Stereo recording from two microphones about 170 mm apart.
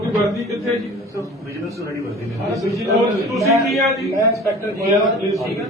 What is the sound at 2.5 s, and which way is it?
Speech, 20° right (ahead or behind).